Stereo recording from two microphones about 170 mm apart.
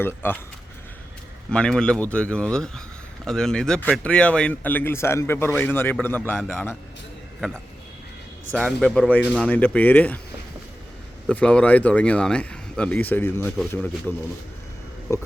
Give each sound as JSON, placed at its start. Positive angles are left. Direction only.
{"t": 0.0, "sound": "speech", "side_deg": 10}
{"t": 1.5, "sound": "a man's voice", "side_deg": 5}
{"t": 8.5, "sound": "speech", "side_deg": 0}
{"t": 11.3, "sound": "a man's voice", "side_deg": 5}
{"t": 15.1, "sound": "speech", "side_deg": 15}